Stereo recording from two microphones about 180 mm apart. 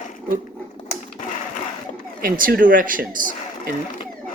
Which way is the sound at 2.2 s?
50° right (ahead or behind).